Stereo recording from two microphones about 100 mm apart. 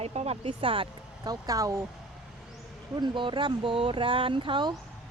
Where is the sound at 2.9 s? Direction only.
50° right (ahead or behind).